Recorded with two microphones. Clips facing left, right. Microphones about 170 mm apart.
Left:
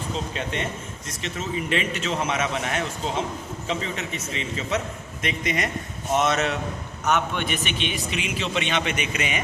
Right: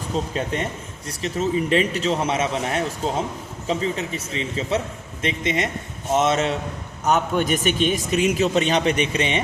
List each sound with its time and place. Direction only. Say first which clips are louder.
0.3 s a man's voice: right 4 dB; 35° right (ahead or behind)